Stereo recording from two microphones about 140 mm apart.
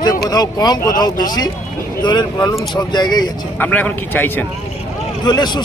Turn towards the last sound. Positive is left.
turn(degrees=30)  # may be behind; listen again after turning